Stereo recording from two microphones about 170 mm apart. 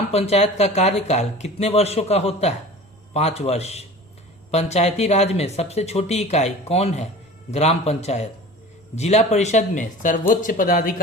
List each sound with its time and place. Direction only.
0.1 s speech: 40° left (ahead or behind); by 11.0 s 55° left (ahead or behind)